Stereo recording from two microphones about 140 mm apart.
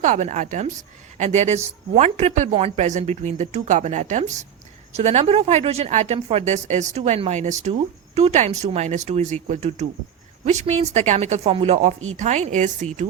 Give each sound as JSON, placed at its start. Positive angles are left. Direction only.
{"t": 0.0, "sound": "speech", "side_deg": -60}